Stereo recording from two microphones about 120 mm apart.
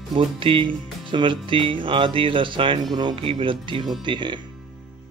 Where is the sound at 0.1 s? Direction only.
45° right (ahead or behind).